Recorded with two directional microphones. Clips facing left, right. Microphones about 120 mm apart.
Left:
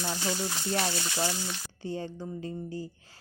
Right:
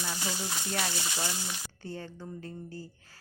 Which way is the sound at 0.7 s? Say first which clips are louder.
Left 4 dB; 25° left (ahead or behind).